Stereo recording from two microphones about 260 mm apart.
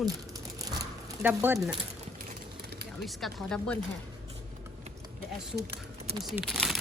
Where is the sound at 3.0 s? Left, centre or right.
Centre.